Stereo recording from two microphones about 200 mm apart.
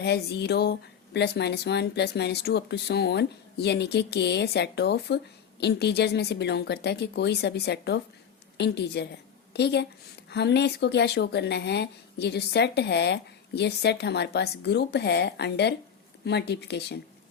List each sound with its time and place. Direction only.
0.0 s a woman's voice: 55° left (ahead or behind)